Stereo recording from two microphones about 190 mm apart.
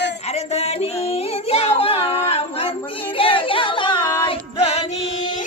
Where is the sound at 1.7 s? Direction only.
30° left (ahead or behind).